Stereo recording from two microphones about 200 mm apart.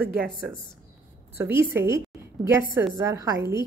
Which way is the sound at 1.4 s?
10° right (ahead or behind).